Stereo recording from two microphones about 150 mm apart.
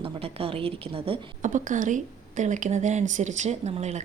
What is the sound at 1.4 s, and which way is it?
Speech, 60° right (ahead or behind).